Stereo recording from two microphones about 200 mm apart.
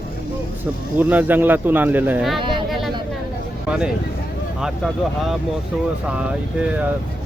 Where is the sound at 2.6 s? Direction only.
Centre (ahead or behind).